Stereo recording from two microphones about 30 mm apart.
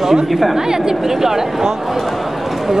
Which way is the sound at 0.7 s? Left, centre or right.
Centre.